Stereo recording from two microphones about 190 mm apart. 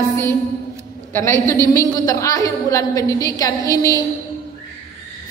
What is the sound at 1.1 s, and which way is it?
A woman's voice, 15° left (ahead or behind).